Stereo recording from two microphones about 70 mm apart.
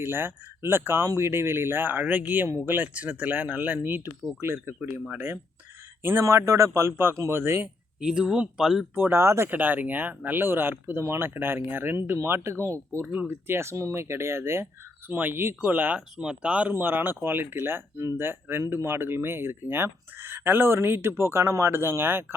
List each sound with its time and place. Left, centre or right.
0.0 s speech: right
8.0 s speech: centre
9.0 s speech: right
9.5 s speech: right
13.1 s speech: right
16.0 s speech: centre
16.7 s speech: right